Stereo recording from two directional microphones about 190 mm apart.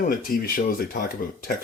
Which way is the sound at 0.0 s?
50° left (ahead or behind).